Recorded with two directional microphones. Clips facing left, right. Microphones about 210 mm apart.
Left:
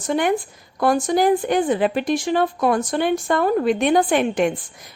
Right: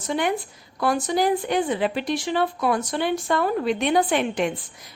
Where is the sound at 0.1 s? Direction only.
50° left (ahead or behind).